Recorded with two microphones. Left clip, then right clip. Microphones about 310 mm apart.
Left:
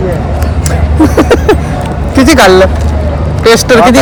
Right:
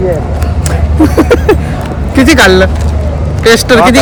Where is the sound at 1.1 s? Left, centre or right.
Centre.